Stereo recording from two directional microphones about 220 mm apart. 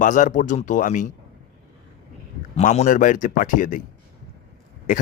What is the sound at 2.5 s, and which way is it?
Speech, 30° left (ahead or behind).